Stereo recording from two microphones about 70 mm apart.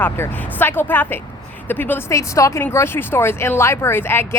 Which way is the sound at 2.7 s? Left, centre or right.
Left.